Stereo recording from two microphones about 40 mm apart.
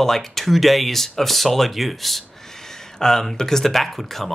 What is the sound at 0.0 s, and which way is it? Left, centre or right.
Speech, centre.